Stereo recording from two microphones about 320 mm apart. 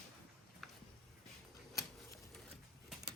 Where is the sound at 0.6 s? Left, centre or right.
Centre.